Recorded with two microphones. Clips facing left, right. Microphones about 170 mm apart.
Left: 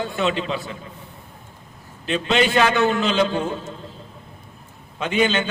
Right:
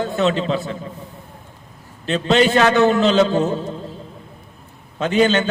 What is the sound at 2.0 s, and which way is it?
A man's voice, 40° right (ahead or behind).